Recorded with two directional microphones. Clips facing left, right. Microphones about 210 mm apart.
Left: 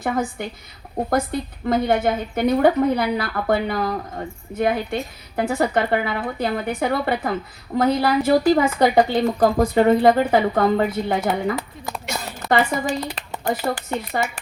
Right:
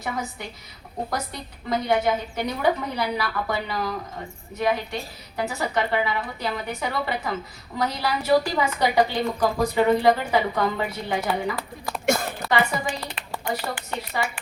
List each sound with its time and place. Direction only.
0.0 s a woman's voice: 50° left (ahead or behind)
12.0 s a sound: 50° right (ahead or behind)
12.5 s a woman's voice: 40° left (ahead or behind)